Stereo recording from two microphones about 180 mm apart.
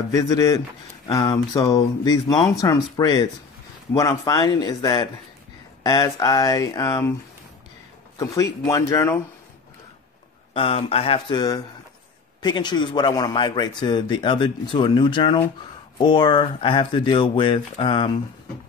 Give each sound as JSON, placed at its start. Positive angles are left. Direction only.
{"t": 0.1, "sound": "speech", "side_deg": 20}
{"t": 8.6, "sound": "speech", "side_deg": 15}
{"t": 10.5, "sound": "speech", "side_deg": 30}